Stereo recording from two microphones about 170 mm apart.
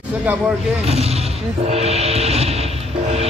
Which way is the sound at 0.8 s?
35° right (ahead or behind).